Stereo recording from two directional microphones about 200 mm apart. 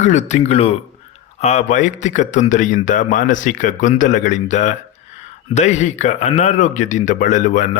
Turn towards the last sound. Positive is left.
turn(degrees=40)  # may be behind; listen again after turning